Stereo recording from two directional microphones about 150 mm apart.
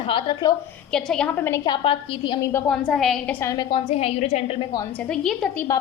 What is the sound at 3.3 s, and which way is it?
A woman's voice, 20° left (ahead or behind).